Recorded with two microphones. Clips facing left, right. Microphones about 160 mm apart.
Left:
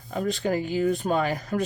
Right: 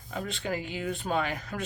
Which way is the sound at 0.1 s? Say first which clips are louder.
Left 7 dB; 45° left (ahead or behind).